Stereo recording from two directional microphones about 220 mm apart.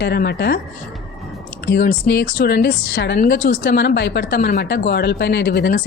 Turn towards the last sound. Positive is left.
turn(degrees=50)  # may be behind; listen again after turning